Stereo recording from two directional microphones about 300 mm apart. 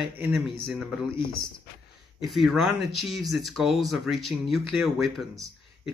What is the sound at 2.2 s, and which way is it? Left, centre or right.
Speech, centre.